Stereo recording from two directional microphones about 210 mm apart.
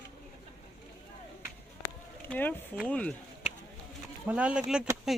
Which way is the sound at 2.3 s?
10° left (ahead or behind).